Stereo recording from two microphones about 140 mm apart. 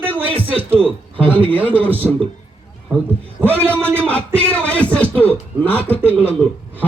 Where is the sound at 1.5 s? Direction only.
10° right (ahead or behind).